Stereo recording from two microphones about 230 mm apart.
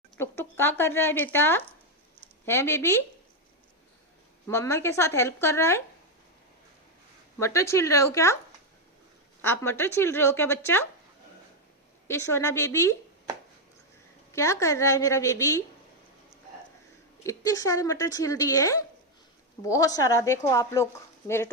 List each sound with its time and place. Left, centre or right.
0.2 s speech: centre
4.4 s speech: centre
7.3 s speech: centre
9.4 s speech: centre
12.0 s speech: centre
14.3 s speech: centre
17.2 s speech: centre